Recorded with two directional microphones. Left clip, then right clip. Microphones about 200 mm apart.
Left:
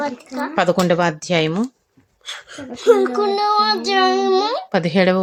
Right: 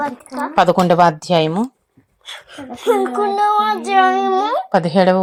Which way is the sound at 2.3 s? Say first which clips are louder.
Even; 30° left (ahead or behind).